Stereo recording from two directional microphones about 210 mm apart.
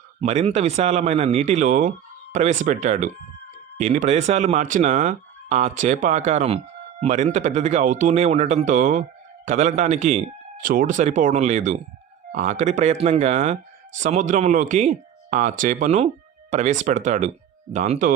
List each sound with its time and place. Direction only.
0.2 s speech: 30° right (ahead or behind)